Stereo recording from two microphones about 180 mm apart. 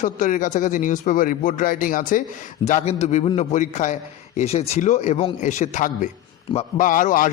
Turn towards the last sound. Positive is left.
turn(degrees=50)  # may be behind; listen again after turning